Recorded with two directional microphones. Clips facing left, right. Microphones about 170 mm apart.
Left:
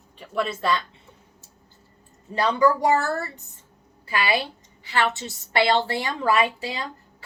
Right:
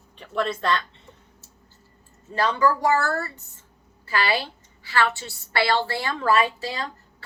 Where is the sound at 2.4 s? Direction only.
15° left (ahead or behind).